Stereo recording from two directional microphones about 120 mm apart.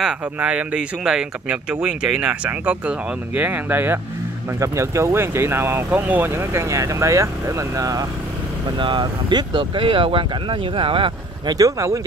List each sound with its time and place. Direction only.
0.0 s speech: 10° right (ahead or behind); by 8.1 s 30° right (ahead or behind)
8.7 s speech: 40° right (ahead or behind)
11.5 s speech: 25° right (ahead or behind)